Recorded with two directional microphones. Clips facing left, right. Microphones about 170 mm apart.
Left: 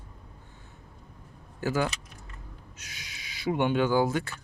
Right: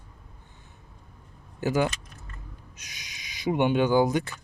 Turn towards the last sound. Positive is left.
turn(degrees=-15)  # may be behind; listen again after turning